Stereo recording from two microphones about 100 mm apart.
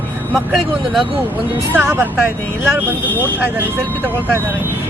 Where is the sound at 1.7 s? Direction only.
20° right (ahead or behind).